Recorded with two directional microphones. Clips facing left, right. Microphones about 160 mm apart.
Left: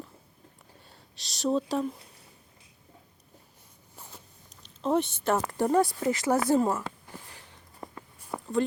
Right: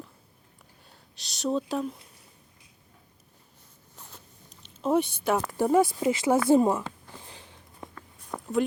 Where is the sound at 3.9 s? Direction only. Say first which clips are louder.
Left 1 dB; 10° left (ahead or behind).